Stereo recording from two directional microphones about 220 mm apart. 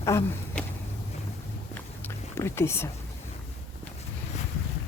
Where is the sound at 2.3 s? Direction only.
10° left (ahead or behind).